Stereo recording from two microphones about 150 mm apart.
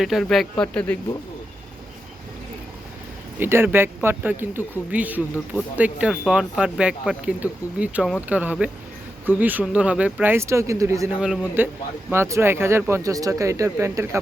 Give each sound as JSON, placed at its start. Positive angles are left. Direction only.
{"t": 0.0, "sound": "speech", "side_deg": 0}
{"t": 3.3, "sound": "speech", "side_deg": -15}
{"t": 11.2, "sound": "speech", "side_deg": -10}